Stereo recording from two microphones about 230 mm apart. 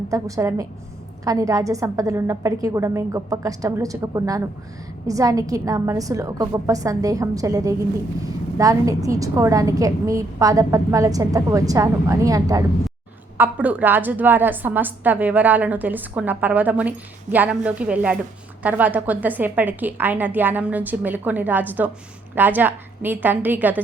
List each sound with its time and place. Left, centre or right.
0.1 s a woman's voice: centre